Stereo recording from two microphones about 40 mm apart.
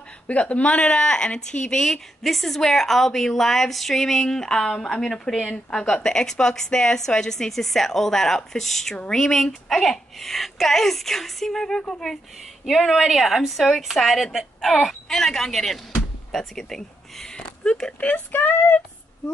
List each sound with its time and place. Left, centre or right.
0.3 s speech: left
1.9 s a woman's voice: centre
12.6 s a woman's voice: centre
15.0 s a woman's voice: centre
18.3 s speech: left